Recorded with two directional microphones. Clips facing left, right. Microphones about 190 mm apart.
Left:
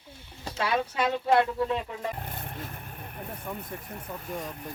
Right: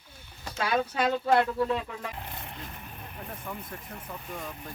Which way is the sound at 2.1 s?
50° left (ahead or behind).